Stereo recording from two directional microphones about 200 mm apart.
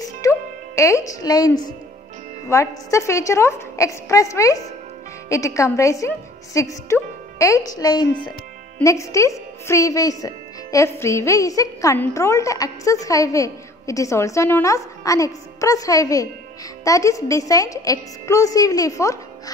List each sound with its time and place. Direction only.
0.0 s music: 15° left (ahead or behind)
2.5 s speech: 15° left (ahead or behind)